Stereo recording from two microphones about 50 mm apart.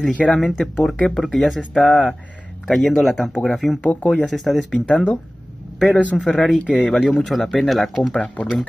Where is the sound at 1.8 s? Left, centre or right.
Left.